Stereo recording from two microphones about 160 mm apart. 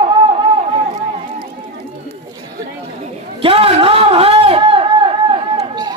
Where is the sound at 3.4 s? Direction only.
35° right (ahead or behind).